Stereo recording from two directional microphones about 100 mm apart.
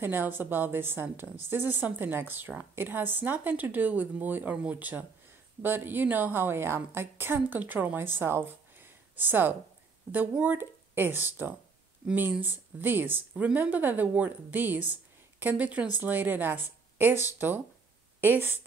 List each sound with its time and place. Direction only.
0.0 s a woman's voice: 20° right (ahead or behind)